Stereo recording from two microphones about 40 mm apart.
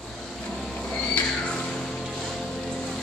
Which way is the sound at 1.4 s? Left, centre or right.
Centre.